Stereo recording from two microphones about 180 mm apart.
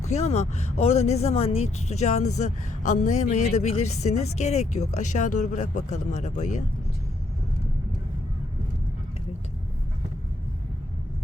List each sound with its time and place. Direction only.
0.0 s speech: 40° left (ahead or behind)